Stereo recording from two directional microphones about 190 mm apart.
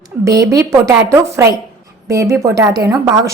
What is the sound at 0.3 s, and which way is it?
A woman's voice, 15° right (ahead or behind).